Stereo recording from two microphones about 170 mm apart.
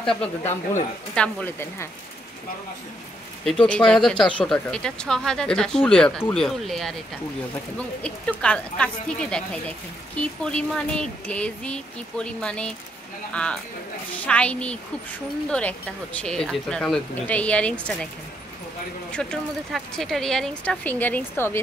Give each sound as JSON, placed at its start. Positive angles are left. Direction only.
{"t": 0.4, "sound": "speech", "side_deg": 40}
{"t": 1.1, "sound": "speech", "side_deg": 10}
{"t": 3.4, "sound": "a woman's voice", "side_deg": 5}
{"t": 8.0, "sound": "a woman's voice", "side_deg": 5}
{"t": 10.4, "sound": "a woman's voice", "side_deg": 5}
{"t": 19.2, "sound": "a woman's voice", "side_deg": 5}